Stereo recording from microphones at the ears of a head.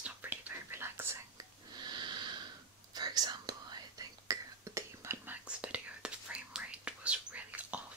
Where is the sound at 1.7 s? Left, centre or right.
Right.